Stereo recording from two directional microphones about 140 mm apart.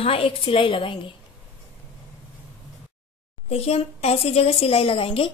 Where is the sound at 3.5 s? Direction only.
45° left (ahead or behind).